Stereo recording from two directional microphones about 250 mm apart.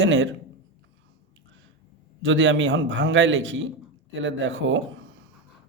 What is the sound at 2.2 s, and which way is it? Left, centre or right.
A man's voice, right.